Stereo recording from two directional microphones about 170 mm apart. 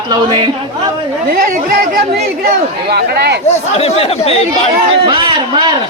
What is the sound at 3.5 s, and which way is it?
Speech, 35° left (ahead or behind).